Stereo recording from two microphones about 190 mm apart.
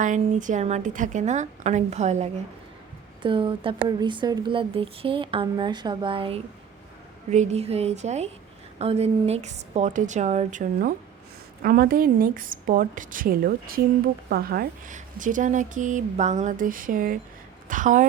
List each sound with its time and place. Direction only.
0.0 s a woman's voice: 40° right (ahead or behind)